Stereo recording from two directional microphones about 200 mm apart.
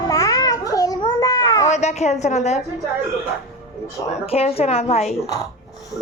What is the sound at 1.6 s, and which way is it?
Speech, 35° left (ahead or behind).